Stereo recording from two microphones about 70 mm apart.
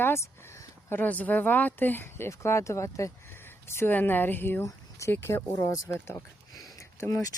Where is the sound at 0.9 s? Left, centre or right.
Left.